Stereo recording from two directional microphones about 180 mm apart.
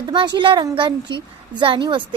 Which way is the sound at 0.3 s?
25° right (ahead or behind).